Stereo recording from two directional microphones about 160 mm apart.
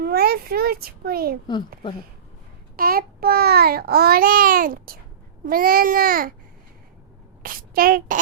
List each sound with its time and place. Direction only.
0.0 s a child's voice: 75° right (ahead or behind)
2.7 s a child's voice: 65° right (ahead or behind)
7.4 s child singing: 65° right (ahead or behind)